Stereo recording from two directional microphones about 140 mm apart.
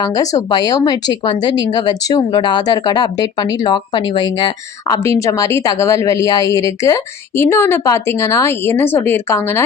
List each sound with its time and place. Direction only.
0.0 s speech: 25° left (ahead or behind)
5.0 s speech: 20° left (ahead or behind)